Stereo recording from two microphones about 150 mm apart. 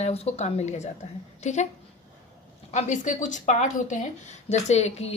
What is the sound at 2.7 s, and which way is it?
Speech, 55° left (ahead or behind).